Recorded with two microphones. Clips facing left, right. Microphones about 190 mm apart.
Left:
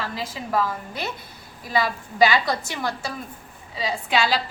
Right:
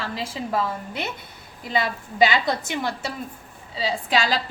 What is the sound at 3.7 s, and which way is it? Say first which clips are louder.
Speech: even; 35° right (ahead or behind).